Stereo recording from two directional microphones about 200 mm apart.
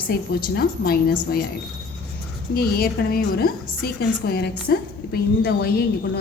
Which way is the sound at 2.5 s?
50° left (ahead or behind).